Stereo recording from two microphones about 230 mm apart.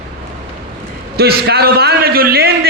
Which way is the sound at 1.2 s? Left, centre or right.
Right.